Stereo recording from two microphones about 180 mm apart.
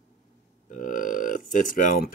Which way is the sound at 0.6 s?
50° left (ahead or behind).